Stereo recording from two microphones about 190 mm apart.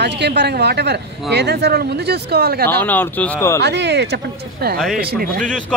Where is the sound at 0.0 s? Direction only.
60° right (ahead or behind).